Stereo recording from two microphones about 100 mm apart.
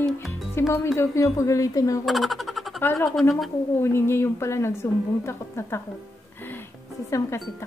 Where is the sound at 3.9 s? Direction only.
25° left (ahead or behind).